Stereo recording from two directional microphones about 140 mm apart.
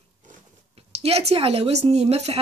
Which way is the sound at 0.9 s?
45° right (ahead or behind).